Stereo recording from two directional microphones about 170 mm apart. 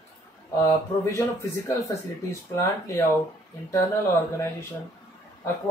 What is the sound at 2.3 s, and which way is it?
Speech, 15° left (ahead or behind).